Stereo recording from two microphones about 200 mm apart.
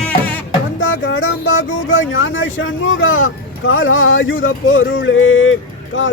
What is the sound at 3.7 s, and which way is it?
Speech, 85° left.